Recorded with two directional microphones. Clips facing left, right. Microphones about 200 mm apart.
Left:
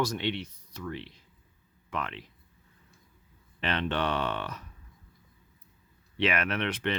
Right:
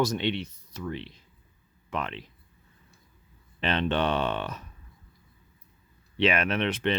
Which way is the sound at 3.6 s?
25° right (ahead or behind).